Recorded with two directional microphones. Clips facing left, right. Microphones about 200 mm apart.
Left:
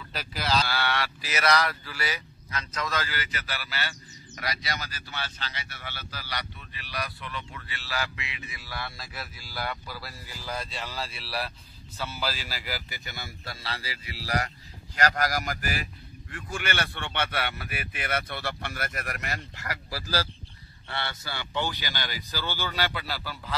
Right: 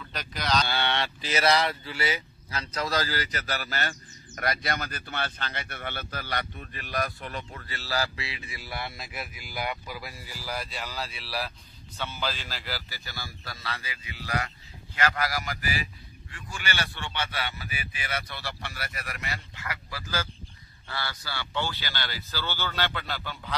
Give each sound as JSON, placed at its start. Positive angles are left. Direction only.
{"t": 0.1, "sound": "a man's voice", "side_deg": 5}
{"t": 0.7, "sound": "a man's voice", "side_deg": -25}
{"t": 20.9, "sound": "speech", "side_deg": 25}